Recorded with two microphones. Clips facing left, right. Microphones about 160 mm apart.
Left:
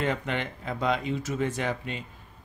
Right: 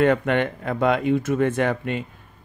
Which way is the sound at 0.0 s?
60° right (ahead or behind).